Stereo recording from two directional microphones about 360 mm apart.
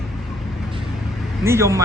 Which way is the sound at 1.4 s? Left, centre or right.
Centre.